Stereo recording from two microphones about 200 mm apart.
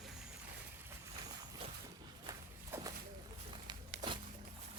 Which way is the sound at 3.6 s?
25° right (ahead or behind).